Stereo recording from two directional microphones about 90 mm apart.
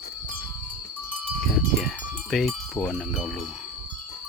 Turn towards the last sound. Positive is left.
turn(degrees=5)  # may be behind; listen again after turning